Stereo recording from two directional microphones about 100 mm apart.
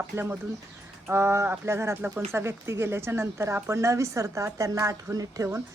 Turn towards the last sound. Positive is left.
turn(degrees=-35)  # may be behind; listen again after turning